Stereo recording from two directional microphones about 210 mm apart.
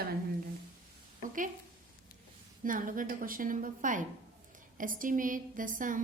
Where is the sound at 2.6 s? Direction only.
40° right (ahead or behind).